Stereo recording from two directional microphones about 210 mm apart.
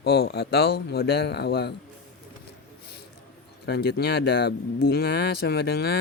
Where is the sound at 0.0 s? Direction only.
50° left (ahead or behind).